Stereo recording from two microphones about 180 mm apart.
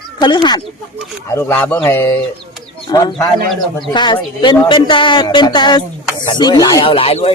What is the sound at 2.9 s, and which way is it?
Speech, 25° left (ahead or behind).